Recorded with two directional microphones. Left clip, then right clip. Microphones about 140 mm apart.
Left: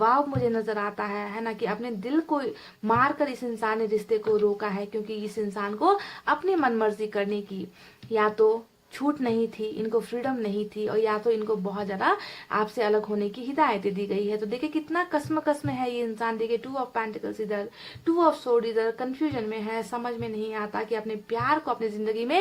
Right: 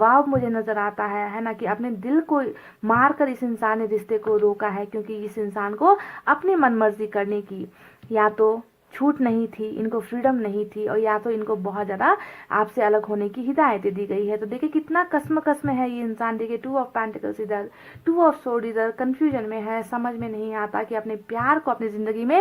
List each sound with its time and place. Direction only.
0.0 s a woman's voice: 25° right (ahead or behind)